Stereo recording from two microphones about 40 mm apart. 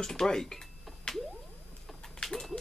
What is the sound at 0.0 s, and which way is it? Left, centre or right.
Speech, centre.